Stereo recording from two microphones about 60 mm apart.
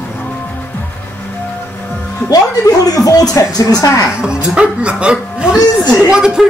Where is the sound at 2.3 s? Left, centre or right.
Left.